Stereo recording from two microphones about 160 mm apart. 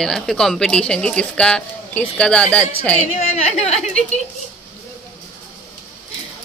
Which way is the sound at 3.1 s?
45° left (ahead or behind).